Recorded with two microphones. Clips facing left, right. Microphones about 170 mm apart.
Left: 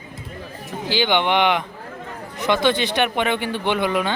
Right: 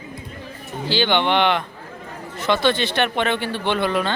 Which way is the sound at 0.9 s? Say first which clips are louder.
Even; 15° left (ahead or behind).